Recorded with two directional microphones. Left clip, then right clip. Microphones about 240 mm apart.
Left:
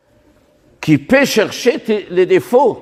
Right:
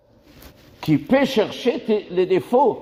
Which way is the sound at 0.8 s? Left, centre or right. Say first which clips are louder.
Left 6 dB; left.